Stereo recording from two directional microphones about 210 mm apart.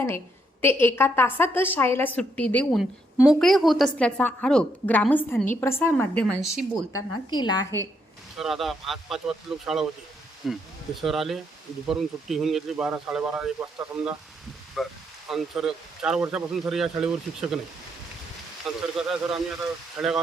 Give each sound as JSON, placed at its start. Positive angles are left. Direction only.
{"t": 0.6, "sound": "a woman's voice", "side_deg": 10}
{"t": 7.3, "sound": "a woman's voice", "side_deg": 20}
{"t": 8.4, "sound": "speech", "side_deg": 0}
{"t": 18.6, "sound": "speech", "side_deg": -5}